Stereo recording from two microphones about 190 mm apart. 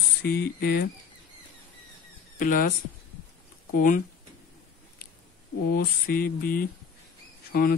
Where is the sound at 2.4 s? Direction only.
45° left (ahead or behind).